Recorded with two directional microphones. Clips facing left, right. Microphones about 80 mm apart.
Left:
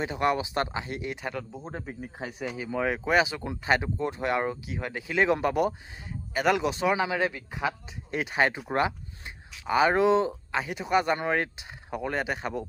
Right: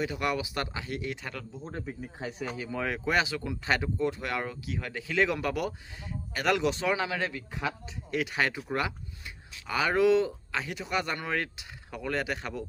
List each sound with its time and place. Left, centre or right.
0.0 s speech: left